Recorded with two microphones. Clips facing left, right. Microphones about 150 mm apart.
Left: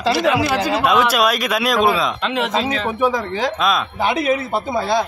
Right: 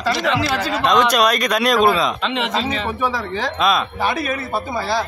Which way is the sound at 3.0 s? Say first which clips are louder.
Left 6 dB; 15° left (ahead or behind).